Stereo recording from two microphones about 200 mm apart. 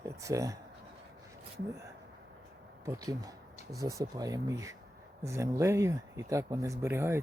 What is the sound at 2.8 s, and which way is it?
Speech, 20° right (ahead or behind).